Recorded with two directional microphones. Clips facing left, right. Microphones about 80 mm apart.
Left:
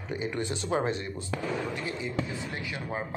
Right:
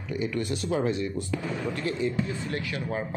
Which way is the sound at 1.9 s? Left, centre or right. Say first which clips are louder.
Right 5 dB; centre.